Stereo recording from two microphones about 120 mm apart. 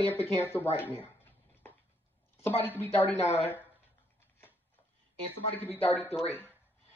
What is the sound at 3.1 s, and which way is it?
Speech, 65° left (ahead or behind).